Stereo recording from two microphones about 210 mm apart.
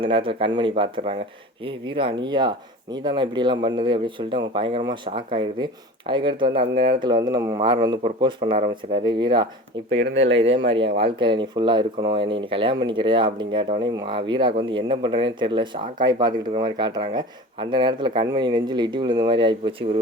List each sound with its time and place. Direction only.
0.0 s speech: 25° right (ahead or behind)